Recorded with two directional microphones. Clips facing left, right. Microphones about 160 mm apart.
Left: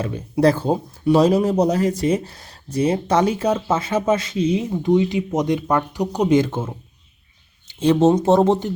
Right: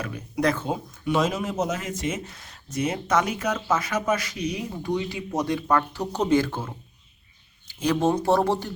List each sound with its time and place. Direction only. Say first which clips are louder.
0.0 s speech: left 8 dB; 30° left (ahead or behind)
7.8 s speech: left 7 dB; 25° left (ahead or behind)